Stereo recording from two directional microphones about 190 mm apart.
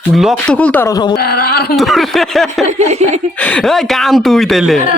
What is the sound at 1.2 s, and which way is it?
Speech, 55° left (ahead or behind).